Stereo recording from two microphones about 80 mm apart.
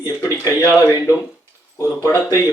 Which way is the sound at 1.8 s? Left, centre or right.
Left.